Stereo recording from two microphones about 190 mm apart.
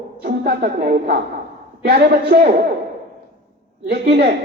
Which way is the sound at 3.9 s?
55° right (ahead or behind).